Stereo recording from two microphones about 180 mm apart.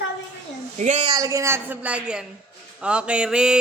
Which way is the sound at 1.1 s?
20° right (ahead or behind).